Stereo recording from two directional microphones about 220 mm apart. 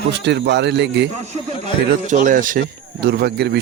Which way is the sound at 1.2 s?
30° right (ahead or behind).